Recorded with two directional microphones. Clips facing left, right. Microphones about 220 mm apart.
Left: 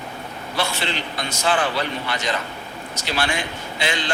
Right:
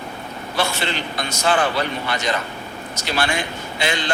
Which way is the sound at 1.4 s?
45° right (ahead or behind).